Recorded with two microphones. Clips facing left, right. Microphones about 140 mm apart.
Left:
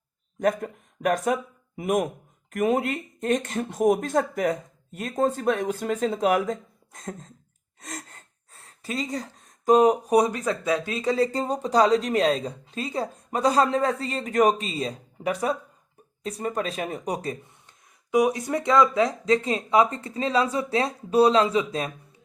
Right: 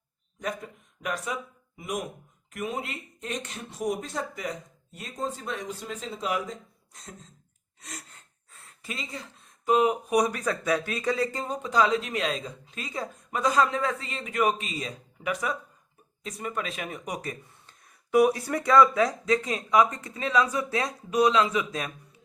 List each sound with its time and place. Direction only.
0.3 s speech: 50° left (ahead or behind)
7.8 s gasp: 45° left (ahead or behind)
8.6 s speech: 35° left (ahead or behind)
17.7 s speech: 15° left (ahead or behind)